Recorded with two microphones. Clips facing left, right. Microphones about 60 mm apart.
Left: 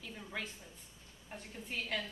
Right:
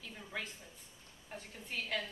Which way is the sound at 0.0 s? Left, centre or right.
Centre.